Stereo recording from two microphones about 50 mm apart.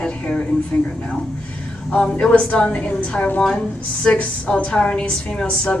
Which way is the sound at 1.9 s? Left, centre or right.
Centre.